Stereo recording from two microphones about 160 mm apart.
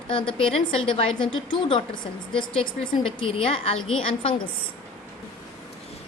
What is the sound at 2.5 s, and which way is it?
A woman's voice, 35° left (ahead or behind).